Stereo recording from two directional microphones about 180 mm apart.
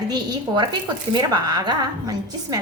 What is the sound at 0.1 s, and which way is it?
A woman's voice, 25° right (ahead or behind).